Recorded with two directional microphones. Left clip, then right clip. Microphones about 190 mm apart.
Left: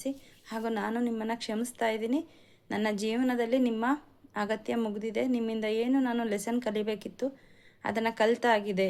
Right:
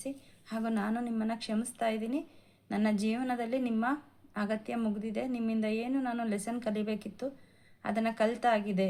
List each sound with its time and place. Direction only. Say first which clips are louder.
0.0 s a woman's voice: left 5 dB; 45° left (ahead or behind)